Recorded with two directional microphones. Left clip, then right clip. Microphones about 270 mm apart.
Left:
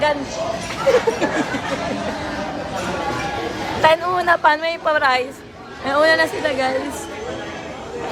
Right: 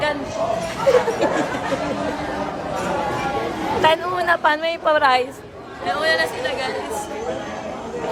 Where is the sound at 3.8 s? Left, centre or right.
Centre.